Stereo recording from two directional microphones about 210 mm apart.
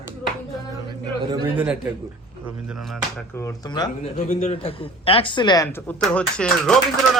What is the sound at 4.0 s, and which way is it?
A man's voice, 30° left (ahead or behind).